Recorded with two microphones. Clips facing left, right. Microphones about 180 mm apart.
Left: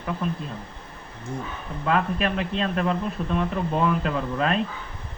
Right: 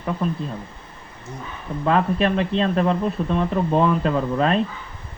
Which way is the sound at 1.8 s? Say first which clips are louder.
Right 4 dB; 35° right (ahead or behind).